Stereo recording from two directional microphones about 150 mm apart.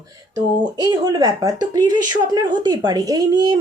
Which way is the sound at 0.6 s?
25° right (ahead or behind).